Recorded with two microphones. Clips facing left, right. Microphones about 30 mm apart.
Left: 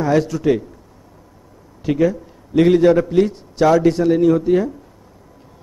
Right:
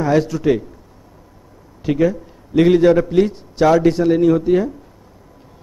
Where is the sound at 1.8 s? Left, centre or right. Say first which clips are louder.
Even; centre.